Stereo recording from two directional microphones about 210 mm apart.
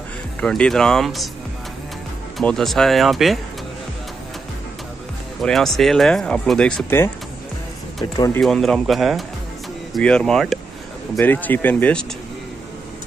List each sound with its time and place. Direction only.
0.4 s speech: 5° left (ahead or behind)
2.3 s speech: centre (ahead or behind)
5.4 s speech: centre (ahead or behind)
8.0 s speech: 20° left (ahead or behind)
8.4 s speech: centre (ahead or behind)